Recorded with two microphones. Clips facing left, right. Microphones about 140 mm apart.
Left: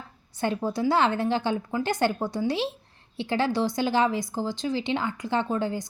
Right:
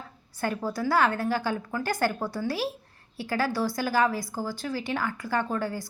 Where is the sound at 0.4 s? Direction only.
20° left (ahead or behind).